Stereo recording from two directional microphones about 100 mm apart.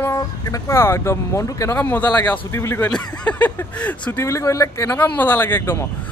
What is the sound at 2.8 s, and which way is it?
Speech, 15° left (ahead or behind).